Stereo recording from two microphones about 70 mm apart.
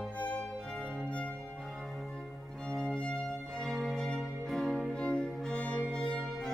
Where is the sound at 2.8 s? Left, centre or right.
Centre.